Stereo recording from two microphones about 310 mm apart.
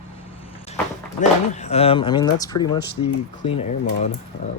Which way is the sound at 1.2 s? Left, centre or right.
Left.